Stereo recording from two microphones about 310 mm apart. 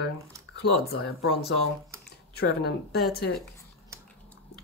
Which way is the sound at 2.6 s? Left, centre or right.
Left.